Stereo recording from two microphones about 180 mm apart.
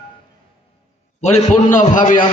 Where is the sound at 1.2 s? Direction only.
40° left (ahead or behind).